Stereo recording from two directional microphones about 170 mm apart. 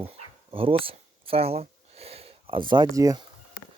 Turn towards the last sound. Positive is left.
turn(degrees=-20)  # may be behind; listen again after turning